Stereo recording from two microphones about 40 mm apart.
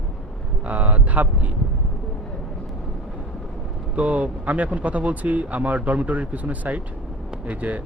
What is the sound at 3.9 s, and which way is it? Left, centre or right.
Speech, right.